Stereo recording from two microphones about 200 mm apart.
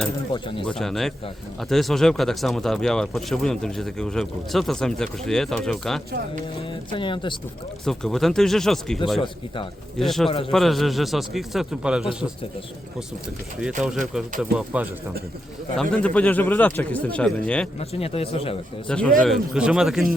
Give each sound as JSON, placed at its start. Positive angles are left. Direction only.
{"t": 0.3, "sound": "speech", "side_deg": 25}
{"t": 0.6, "sound": "speech", "side_deg": 0}
{"t": 6.1, "sound": "speech", "side_deg": -50}
{"t": 6.6, "sound": "speech", "side_deg": 25}
{"t": 7.9, "sound": "speech", "side_deg": 0}
{"t": 10.0, "sound": "speech", "side_deg": 0}
{"t": 10.2, "sound": "speech", "side_deg": 25}
{"t": 10.5, "sound": "speech", "side_deg": 0}
{"t": 14.1, "sound": "speech", "side_deg": 0}
{"t": 17.7, "sound": "speech", "side_deg": 30}
{"t": 18.9, "sound": "speech", "side_deg": 5}